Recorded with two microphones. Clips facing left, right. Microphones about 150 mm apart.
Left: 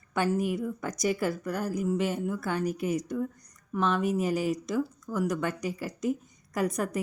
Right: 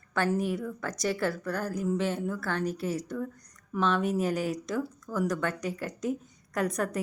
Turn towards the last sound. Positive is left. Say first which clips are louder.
# even
turn(degrees=10)  # may be behind; listen again after turning